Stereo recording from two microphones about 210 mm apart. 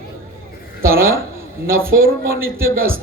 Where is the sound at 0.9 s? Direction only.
45° right (ahead or behind).